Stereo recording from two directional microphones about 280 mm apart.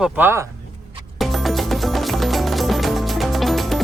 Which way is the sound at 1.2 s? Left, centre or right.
Centre.